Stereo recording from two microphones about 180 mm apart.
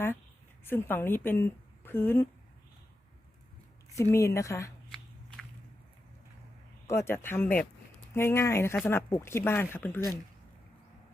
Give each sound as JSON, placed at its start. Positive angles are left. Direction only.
{"t": 0.6, "sound": "speech", "side_deg": 10}
{"t": 4.1, "sound": "speech", "side_deg": 15}
{"t": 6.8, "sound": "speech", "side_deg": 15}